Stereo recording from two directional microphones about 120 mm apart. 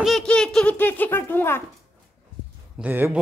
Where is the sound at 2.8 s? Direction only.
15° right (ahead or behind).